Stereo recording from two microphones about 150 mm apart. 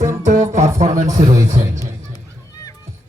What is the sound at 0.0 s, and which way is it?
Music, 20° right (ahead or behind).